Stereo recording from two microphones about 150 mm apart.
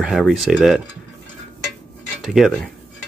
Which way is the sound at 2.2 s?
Centre (ahead or behind).